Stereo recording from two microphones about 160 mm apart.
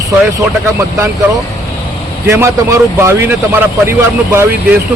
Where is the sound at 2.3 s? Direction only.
15° right (ahead or behind).